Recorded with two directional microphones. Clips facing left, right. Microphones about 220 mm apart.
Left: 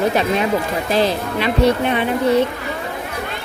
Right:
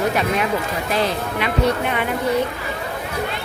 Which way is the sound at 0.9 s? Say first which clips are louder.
Left 4 dB; 30° left (ahead or behind).